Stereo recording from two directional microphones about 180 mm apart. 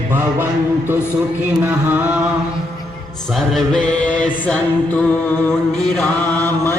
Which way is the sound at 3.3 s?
Centre (ahead or behind).